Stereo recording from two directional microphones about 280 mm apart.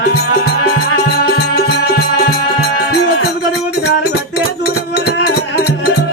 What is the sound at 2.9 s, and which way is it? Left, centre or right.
Music, left.